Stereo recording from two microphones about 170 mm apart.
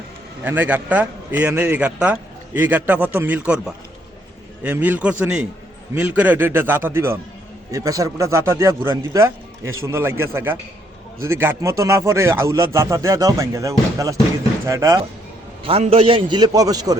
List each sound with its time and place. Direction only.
0.4 s a man's voice: 10° right (ahead or behind)
4.6 s a man's voice: 10° right (ahead or behind)
15.6 s a man's voice: 35° right (ahead or behind)